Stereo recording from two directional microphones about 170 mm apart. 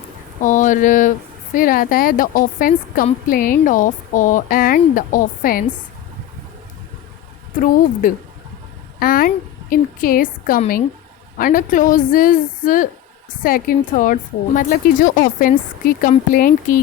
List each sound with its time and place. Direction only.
0.4 s a sound: 50° left (ahead or behind)
1.5 s speech: 55° left (ahead or behind)
8.0 s a woman's voice: 50° left (ahead or behind)